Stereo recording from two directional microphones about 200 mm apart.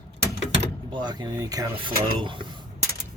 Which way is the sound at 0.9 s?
20° right (ahead or behind).